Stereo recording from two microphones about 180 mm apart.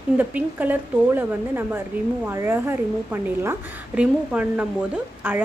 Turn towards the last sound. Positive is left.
turn(degrees=-10)  # may be behind; listen again after turning